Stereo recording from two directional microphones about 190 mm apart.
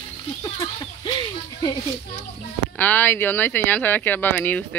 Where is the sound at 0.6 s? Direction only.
25° left (ahead or behind).